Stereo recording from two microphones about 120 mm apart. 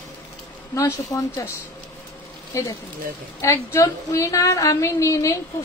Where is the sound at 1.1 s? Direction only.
25° left (ahead or behind).